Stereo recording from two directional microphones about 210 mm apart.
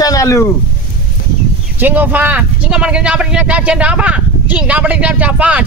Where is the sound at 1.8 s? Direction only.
10° right (ahead or behind).